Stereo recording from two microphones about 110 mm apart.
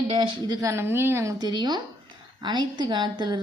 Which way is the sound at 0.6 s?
25° right (ahead or behind).